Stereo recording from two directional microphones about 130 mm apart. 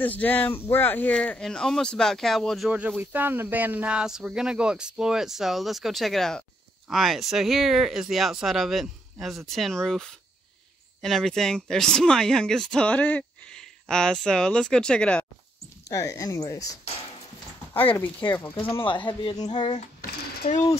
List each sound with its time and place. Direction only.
0.0 s speech: 15° left (ahead or behind)
3.0 s speech: 15° right (ahead or behind); by 15.2 s 10° left (ahead or behind)
15.9 s speech: 25° left (ahead or behind)
18.2 s speech: 30° left (ahead or behind)